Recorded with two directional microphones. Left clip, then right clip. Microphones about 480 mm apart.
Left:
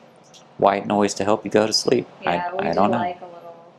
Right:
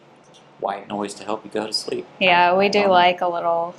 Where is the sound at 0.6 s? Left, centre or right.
Left.